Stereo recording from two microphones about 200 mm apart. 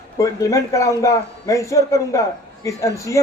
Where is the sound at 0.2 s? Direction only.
15° left (ahead or behind).